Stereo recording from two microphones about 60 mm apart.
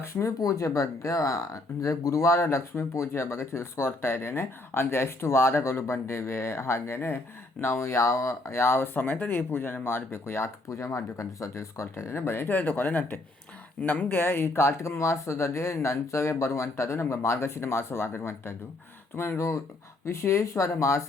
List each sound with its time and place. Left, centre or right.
0.0 s speech: left
0.3 s speech: left
13.8 s speech: left
14.1 s speech: left